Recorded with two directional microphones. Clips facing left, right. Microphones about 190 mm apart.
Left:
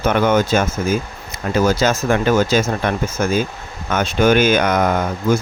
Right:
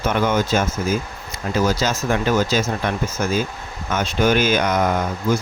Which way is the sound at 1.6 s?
55° left (ahead or behind).